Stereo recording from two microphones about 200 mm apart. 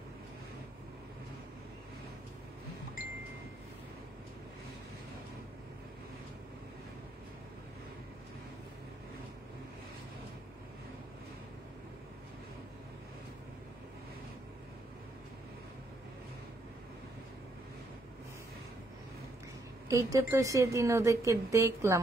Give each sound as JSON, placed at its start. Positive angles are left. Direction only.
{"t": 19.9, "sound": "a woman's voice", "side_deg": -15}